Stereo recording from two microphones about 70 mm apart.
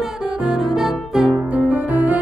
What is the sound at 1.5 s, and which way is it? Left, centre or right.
Music, right.